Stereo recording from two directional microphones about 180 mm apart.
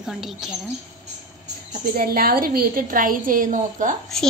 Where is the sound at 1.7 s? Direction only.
55° right (ahead or behind).